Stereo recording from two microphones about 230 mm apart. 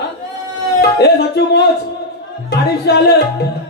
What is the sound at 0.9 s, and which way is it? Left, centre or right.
Speech, left.